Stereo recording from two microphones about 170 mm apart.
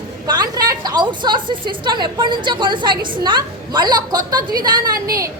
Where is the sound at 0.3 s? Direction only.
25° right (ahead or behind).